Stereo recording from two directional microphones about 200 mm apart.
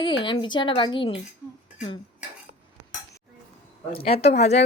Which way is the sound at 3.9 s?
30° left (ahead or behind).